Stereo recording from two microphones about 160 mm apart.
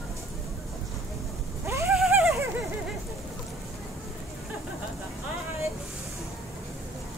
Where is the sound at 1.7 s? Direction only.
15° right (ahead or behind).